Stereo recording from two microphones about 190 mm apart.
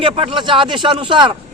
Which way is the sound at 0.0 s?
25° right (ahead or behind).